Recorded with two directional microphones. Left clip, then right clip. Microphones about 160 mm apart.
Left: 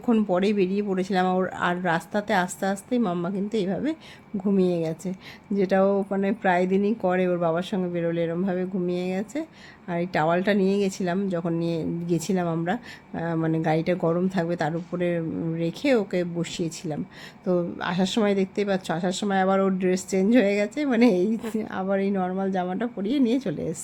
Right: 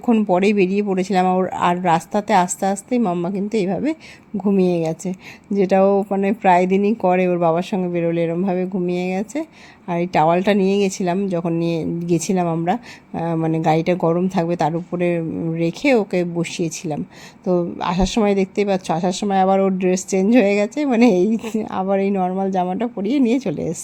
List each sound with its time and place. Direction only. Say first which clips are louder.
0.0 s speech: right 5 dB; 15° right (ahead or behind)
0.3 s speech: right 7 dB; 30° right (ahead or behind)